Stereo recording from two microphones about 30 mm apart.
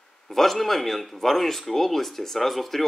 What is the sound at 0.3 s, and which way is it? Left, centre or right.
Speech, centre.